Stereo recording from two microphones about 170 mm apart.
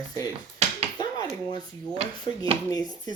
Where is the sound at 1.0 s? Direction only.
20° left (ahead or behind).